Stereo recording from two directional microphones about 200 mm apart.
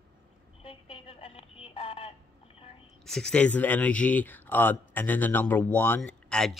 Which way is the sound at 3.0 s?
5° left (ahead or behind).